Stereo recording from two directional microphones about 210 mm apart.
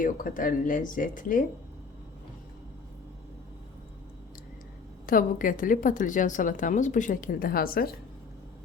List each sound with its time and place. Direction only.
0.0 s speech: 40° left (ahead or behind)
5.0 s speech: 40° left (ahead or behind)